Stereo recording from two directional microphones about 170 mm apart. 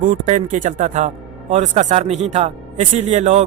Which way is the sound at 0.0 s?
50° right (ahead or behind).